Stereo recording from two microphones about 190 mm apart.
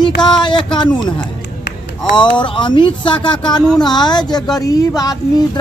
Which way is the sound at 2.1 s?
25° left (ahead or behind).